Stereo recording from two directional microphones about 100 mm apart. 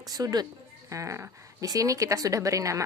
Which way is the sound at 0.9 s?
30° right (ahead or behind).